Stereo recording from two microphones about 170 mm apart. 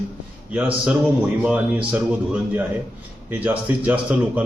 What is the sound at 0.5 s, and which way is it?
A man's voice, 10° right (ahead or behind).